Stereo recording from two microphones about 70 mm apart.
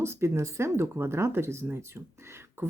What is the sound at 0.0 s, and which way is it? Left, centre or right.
Speech, right.